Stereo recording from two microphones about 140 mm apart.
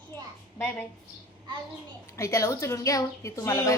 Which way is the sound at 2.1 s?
20° left (ahead or behind).